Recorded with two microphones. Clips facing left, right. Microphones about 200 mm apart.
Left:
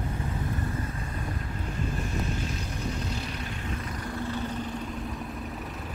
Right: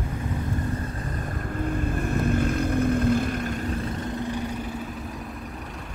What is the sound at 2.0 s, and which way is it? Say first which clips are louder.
Vehicle: right 8 dB; 55° right (ahead or behind).